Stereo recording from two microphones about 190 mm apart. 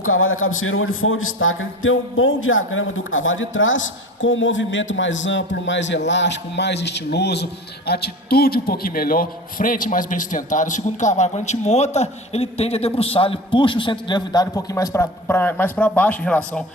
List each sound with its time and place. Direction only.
0.0 s a man's voice: 90° left; by 16.4 s 5° left (ahead or behind)